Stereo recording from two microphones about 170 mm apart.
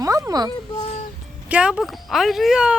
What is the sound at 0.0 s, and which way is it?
Music, 20° right (ahead or behind).